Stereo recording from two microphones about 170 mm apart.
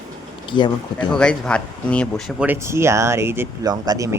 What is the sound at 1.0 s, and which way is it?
Speech, 5° left (ahead or behind).